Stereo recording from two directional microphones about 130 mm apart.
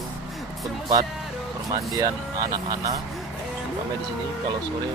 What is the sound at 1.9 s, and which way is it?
Speech, 25° right (ahead or behind).